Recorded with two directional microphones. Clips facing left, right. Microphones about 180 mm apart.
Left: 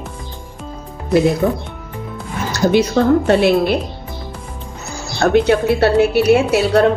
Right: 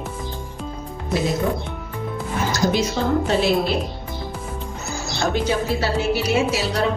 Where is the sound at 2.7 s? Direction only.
65° left (ahead or behind).